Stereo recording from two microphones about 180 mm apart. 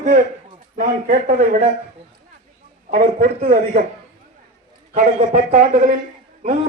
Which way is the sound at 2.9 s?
45° right (ahead or behind).